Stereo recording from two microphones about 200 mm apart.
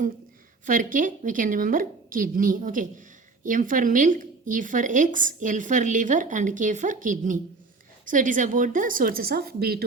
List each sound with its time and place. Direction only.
0.6 s a woman's voice: 40° right (ahead or behind)